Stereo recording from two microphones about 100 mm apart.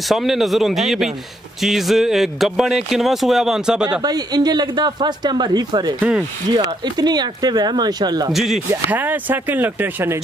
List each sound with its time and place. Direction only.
0.1 s speech: centre (ahead or behind)
4.0 s speech: 40° right (ahead or behind)
5.9 s speech: 10° right (ahead or behind)
6.5 s speech: 45° right (ahead or behind)
8.3 s speech: centre (ahead or behind)
8.9 s speech: 20° right (ahead or behind)